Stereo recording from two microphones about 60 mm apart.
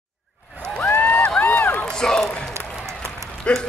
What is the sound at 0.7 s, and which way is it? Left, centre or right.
Run, left.